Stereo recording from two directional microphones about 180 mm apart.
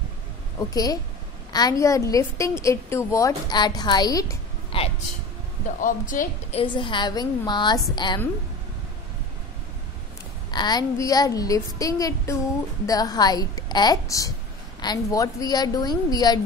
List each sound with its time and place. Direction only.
0.6 s a child's voice: 20° left (ahead or behind)
4.7 s a sound: 30° left (ahead or behind)
5.8 s speech: 45° left (ahead or behind)
6.5 s a child's voice: 30° left (ahead or behind)
10.5 s a child's voice: 25° left (ahead or behind)